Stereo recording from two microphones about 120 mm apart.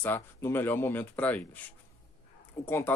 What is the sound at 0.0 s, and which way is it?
Speech, 20° left (ahead or behind).